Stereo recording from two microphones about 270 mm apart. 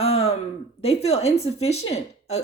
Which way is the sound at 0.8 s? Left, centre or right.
Left.